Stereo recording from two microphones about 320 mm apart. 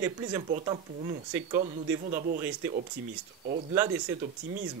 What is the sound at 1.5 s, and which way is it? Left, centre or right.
Speech, centre.